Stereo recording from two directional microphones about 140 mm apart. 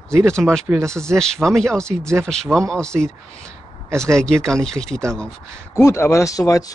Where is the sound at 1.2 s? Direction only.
5° left (ahead or behind).